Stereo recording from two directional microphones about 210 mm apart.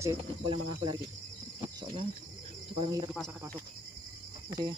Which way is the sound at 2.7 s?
15° right (ahead or behind).